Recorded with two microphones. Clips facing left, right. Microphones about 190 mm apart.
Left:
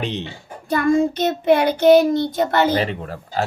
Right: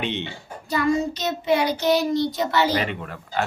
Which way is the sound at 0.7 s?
50° left (ahead or behind).